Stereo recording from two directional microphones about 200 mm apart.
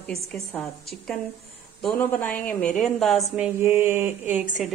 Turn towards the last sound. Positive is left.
turn(degrees=-5)  # may be behind; listen again after turning